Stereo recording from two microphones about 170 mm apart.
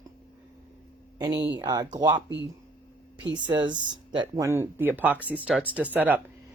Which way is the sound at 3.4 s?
25° right (ahead or behind).